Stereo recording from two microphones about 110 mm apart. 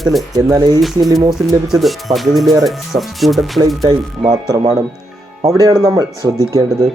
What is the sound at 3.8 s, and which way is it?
Speech, 40° right (ahead or behind).